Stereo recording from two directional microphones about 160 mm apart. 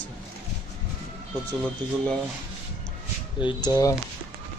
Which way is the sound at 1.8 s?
25° right (ahead or behind).